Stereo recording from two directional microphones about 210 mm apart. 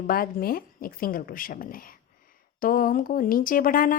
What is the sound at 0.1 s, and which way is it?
A woman's voice, 45° left (ahead or behind).